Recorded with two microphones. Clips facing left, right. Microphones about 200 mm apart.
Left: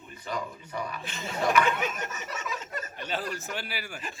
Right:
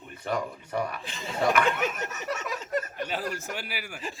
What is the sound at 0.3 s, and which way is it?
Speech, 60° right (ahead or behind).